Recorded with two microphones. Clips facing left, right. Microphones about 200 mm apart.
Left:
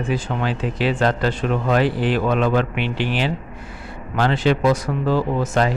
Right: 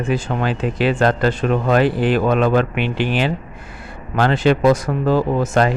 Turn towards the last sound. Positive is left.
turn(degrees=-50)  # may be behind; listen again after turning